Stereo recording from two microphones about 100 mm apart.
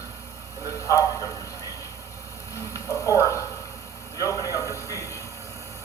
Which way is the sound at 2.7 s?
30° left (ahead or behind).